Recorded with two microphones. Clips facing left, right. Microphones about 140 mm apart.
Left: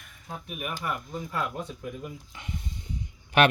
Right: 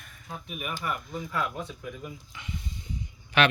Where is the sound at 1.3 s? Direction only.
40° left (ahead or behind).